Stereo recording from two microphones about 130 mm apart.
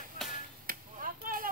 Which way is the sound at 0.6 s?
90° right.